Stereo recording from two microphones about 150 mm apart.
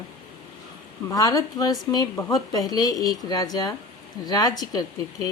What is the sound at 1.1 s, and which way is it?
Speech, 25° left (ahead or behind).